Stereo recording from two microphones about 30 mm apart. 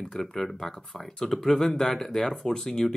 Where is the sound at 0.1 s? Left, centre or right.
Centre.